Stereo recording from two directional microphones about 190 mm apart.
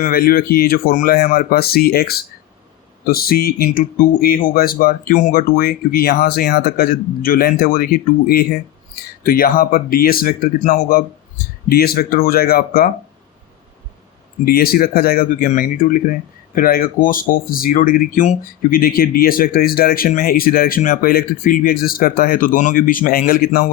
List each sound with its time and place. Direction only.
0.0 s speech: 50° left (ahead or behind)
14.4 s speech: 50° left (ahead or behind)